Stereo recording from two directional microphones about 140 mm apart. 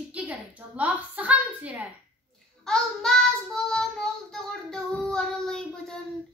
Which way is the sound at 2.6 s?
5° left (ahead or behind).